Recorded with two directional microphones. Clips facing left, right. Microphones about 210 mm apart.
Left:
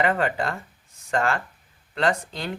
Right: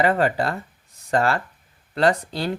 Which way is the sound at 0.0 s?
35° right (ahead or behind).